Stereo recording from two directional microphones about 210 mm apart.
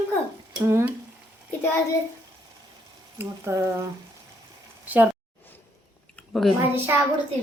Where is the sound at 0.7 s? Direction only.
15° right (ahead or behind).